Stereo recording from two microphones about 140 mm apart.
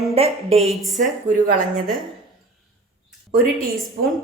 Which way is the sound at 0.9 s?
70° right (ahead or behind).